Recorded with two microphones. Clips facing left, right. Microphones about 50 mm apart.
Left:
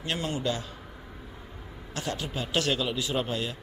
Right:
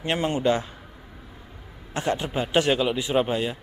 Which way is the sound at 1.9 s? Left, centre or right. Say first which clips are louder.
Right 7 dB; right.